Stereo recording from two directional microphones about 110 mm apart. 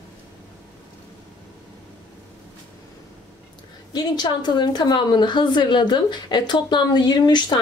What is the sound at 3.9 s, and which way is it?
A woman's voice, 40° left (ahead or behind).